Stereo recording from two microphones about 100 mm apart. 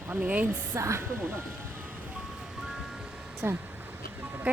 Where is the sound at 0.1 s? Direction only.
15° right (ahead or behind).